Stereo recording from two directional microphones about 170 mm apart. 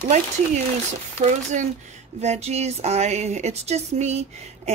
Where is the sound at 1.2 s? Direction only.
45° right (ahead or behind).